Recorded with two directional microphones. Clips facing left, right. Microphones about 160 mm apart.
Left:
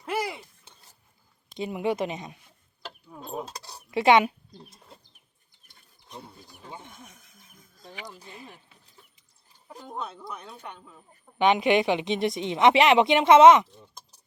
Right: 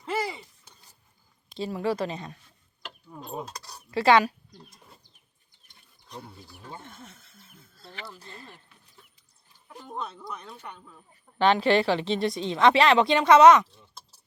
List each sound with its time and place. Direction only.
0.0 s a sound: 10° left (ahead or behind)
1.5 s speech: 15° left (ahead or behind)
3.1 s speech: centre (ahead or behind)
3.4 s a sound: 25° left (ahead or behind)
3.9 s speech: 20° left (ahead or behind)
6.6 s speech: 15° left (ahead or behind)
9.8 s speech: 10° left (ahead or behind)